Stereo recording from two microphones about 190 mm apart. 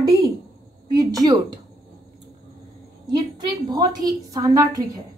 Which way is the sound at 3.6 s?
20° right (ahead or behind).